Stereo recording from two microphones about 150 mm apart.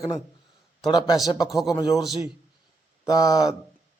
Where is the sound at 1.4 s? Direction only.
Centre (ahead or behind).